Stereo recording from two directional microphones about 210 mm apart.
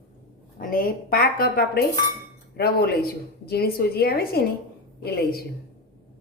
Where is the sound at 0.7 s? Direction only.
45° left (ahead or behind).